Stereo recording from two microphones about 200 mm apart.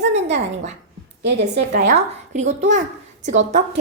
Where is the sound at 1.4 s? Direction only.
55° right (ahead or behind).